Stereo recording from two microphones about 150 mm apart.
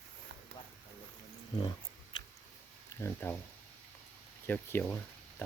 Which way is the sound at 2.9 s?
15° left (ahead or behind).